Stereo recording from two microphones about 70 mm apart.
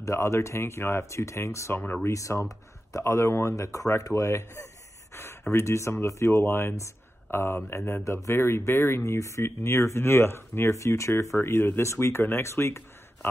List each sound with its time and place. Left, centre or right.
0.0 s speech: left
5.1 s a sound: left
5.5 s speech: left